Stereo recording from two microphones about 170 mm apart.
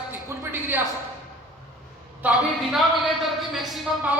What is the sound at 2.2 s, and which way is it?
A woman's voice, centre (ahead or behind).